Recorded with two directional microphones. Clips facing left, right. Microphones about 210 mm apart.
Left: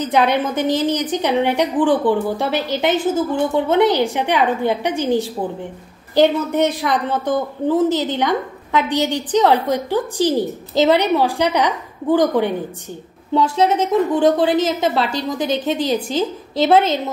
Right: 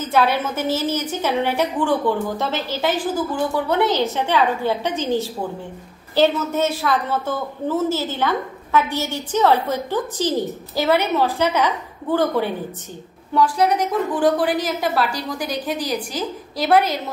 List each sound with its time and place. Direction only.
0.0 s a woman's voice: 20° left (ahead or behind)